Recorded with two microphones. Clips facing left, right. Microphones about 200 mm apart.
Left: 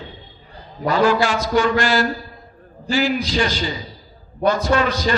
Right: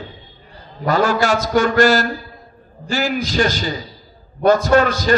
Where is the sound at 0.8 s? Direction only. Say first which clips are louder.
Even; 45° right (ahead or behind).